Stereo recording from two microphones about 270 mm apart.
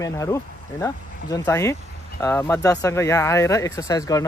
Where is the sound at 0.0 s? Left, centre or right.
Centre.